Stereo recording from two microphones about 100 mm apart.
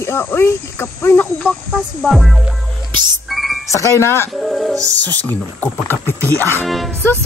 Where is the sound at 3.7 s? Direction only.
30° left (ahead or behind).